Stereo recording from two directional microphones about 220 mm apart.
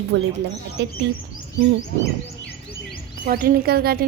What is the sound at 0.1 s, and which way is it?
Speech, 55° right (ahead or behind).